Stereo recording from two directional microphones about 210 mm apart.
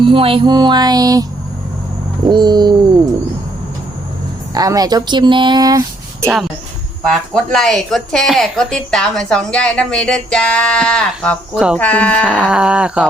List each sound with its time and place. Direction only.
0.0 s speech: 25° right (ahead or behind)
2.3 s speech: 20° right (ahead or behind)
4.5 s speech: 15° right (ahead or behind)
7.1 s speech: centre (ahead or behind)